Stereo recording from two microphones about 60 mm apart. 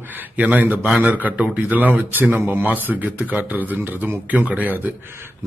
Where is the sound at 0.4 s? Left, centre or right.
Right.